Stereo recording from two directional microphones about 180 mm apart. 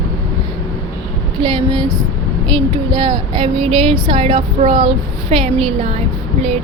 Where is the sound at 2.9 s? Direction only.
25° right (ahead or behind).